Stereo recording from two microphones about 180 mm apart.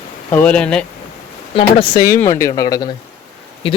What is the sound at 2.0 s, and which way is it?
Speech, 20° left (ahead or behind).